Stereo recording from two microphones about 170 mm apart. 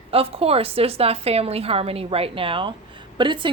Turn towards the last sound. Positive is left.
turn(degrees=-30)  # may be behind; listen again after turning